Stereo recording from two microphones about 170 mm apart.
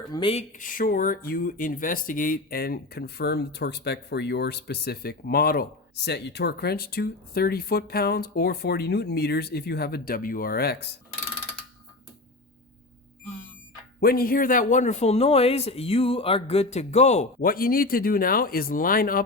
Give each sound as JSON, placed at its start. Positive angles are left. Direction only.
{"t": 0.1, "sound": "a man's voice", "side_deg": 30}
{"t": 0.5, "sound": "speech", "side_deg": 50}
{"t": 14.0, "sound": "a man's voice", "side_deg": 60}
{"t": 17.4, "sound": "speech", "side_deg": 60}